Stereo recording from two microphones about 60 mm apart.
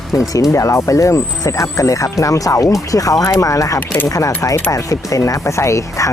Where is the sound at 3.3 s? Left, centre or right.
Left.